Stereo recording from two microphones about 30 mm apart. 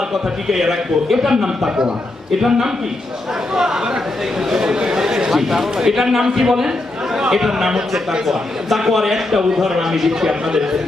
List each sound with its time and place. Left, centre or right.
0.1 s a man's voice: centre
4.5 s a man's voice: centre
4.7 s chatter: right
5.3 s a man's voice: centre
8.9 s a man's voice: centre